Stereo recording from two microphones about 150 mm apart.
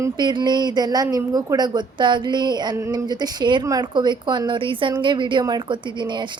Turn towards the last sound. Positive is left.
turn(degrees=-30)  # may be behind; listen again after turning